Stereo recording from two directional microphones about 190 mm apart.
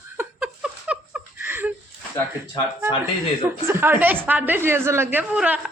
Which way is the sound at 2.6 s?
25° left (ahead or behind).